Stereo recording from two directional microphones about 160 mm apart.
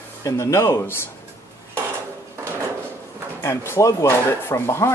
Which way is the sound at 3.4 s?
15° left (ahead or behind).